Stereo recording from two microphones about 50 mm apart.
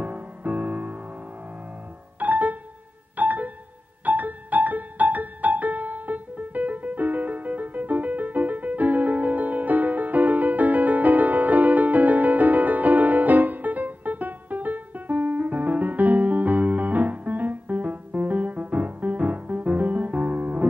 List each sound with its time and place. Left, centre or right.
0.0 s music: right
2.1 s music: right